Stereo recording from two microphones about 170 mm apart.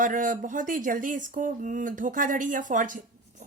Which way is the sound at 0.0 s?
50° right (ahead or behind).